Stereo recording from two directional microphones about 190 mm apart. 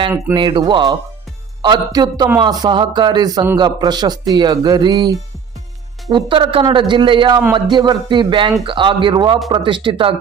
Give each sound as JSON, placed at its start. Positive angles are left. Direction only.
{"t": 0.3, "sound": "a man's voice", "side_deg": -25}